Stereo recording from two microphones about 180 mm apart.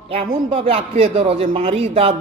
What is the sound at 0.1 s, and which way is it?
A man's voice, 30° right (ahead or behind).